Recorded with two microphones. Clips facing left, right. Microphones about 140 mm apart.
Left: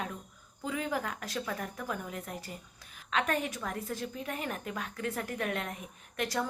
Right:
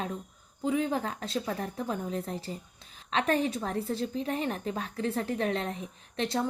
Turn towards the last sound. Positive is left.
turn(degrees=-25)  # may be behind; listen again after turning